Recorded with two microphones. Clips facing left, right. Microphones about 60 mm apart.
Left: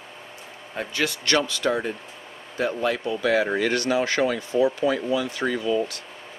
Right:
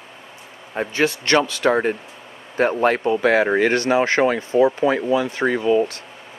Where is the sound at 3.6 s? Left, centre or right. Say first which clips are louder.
Right 5 dB; right.